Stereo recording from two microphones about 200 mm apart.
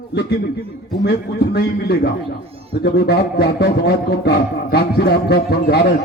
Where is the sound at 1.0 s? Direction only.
55° left (ahead or behind).